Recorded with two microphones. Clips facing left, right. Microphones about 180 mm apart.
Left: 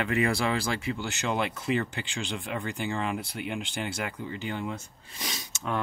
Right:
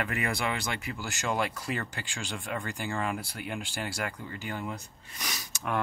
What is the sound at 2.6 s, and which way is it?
Speech, 20° left (ahead or behind).